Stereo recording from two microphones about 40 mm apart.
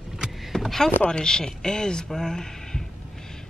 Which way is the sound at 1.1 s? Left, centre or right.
Centre.